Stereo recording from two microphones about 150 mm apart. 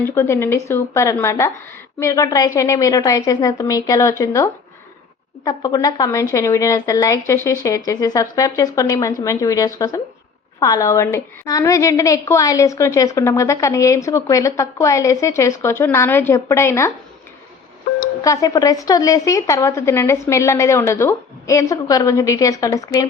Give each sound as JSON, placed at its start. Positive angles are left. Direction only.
{"t": 0.0, "sound": "a woman's voice", "side_deg": 15}
{"t": 5.5, "sound": "a woman's voice", "side_deg": 25}
{"t": 18.2, "sound": "a woman's voice", "side_deg": 20}